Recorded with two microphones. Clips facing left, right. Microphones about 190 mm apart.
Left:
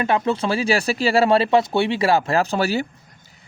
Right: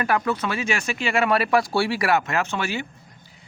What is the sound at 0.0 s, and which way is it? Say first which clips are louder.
Speech: left 3 dB; 25° left (ahead or behind).